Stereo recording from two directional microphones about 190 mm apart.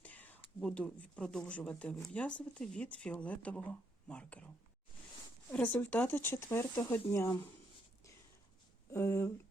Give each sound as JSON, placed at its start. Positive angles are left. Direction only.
{"t": 0.0, "sound": "speech", "side_deg": 10}
{"t": 5.5, "sound": "speech", "side_deg": 10}
{"t": 8.9, "sound": "speech", "side_deg": 15}